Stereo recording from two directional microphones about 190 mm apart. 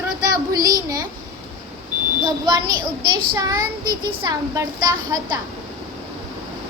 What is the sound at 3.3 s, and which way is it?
A child's voice, 20° right (ahead or behind).